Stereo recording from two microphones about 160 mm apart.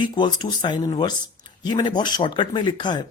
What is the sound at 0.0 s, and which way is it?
Speech, 30° left (ahead or behind).